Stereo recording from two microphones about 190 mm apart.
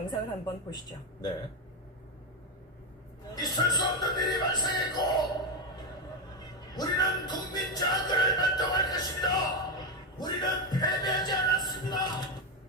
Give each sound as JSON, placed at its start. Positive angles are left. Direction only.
{"t": 0.1, "sound": "speech", "side_deg": 20}
{"t": 3.3, "sound": "speech", "side_deg": 20}
{"t": 6.7, "sound": "music", "side_deg": 20}
{"t": 11.7, "sound": "a sound", "side_deg": 20}